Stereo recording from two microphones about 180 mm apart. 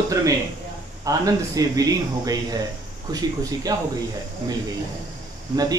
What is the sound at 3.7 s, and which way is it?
Speech, 20° right (ahead or behind).